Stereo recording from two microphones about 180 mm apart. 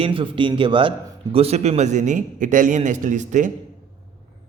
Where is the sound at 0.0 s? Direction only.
30° right (ahead or behind).